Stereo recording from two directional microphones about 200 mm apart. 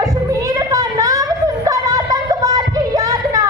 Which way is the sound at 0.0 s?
15° right (ahead or behind).